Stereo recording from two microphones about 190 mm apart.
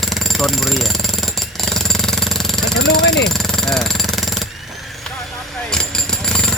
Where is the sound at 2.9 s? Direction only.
60° left (ahead or behind).